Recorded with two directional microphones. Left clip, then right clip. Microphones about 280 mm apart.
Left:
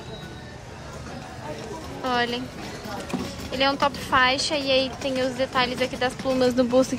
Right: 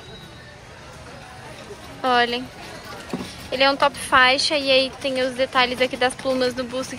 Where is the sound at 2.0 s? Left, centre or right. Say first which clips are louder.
Right 6 dB; centre.